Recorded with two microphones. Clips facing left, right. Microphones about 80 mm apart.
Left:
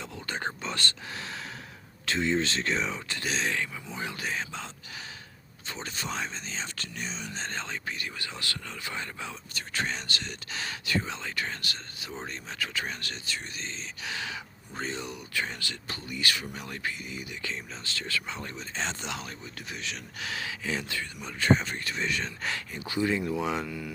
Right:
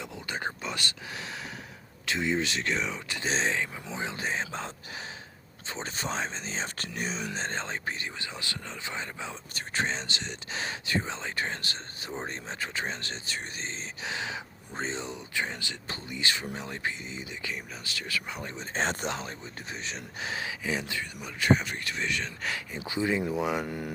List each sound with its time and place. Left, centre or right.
0.0 s whispering: centre
2.0 s speech: centre
3.2 s speech: right
9.6 s speech: right; by 18.5 s centre
18.6 s speech: right; by 22.6 s centre
22.7 s speech: centre
23.6 s speech: right